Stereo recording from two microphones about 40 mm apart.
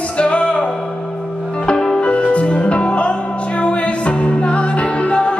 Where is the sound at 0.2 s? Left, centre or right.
Left.